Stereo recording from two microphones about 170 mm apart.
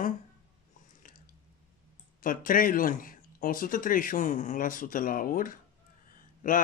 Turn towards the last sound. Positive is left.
turn(degrees=50)  # may be behind; listen again after turning